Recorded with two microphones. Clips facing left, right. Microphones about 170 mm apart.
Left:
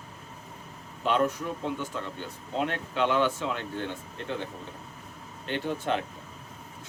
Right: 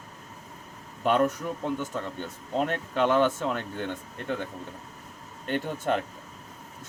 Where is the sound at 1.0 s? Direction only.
45° right (ahead or behind).